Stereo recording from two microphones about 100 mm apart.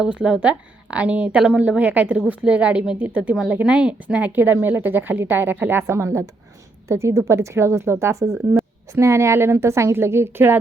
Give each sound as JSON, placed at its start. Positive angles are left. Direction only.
{"t": 0.0, "sound": "a woman's voice", "side_deg": -10}